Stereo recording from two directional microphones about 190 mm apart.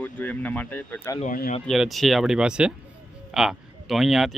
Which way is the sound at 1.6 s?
Centre (ahead or behind).